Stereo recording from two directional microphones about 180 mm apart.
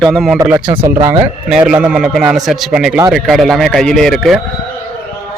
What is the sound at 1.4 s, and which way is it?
A man's voice, 5° right (ahead or behind).